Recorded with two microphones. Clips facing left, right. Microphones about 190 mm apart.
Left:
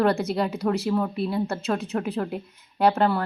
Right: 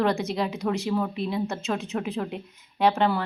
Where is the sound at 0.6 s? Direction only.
Centre (ahead or behind).